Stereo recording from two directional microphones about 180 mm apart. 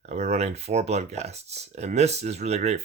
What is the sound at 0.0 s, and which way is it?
Speech, 40° right (ahead or behind).